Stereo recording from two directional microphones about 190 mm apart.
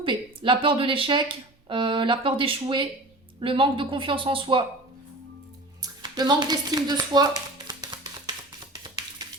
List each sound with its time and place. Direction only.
0.0 s speech: 25° right (ahead or behind)
5.8 s speech: 20° right (ahead or behind)
8.7 s a sound: 20° right (ahead or behind)